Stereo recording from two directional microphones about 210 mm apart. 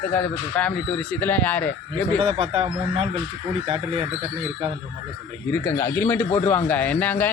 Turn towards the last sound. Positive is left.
turn(degrees=10)  # may be behind; listen again after turning